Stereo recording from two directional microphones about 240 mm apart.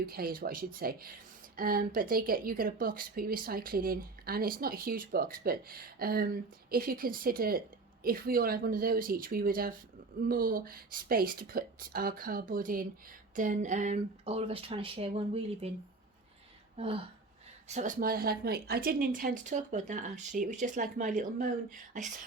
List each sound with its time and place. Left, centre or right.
0.0 s speech: right
17.7 s speech: right